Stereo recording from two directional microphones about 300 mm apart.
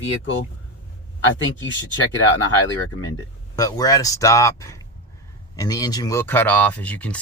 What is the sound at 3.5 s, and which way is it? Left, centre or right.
Speech, centre.